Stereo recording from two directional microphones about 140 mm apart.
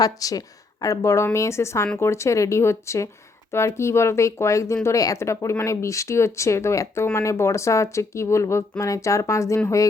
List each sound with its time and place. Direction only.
0.0 s speech: 25° left (ahead or behind)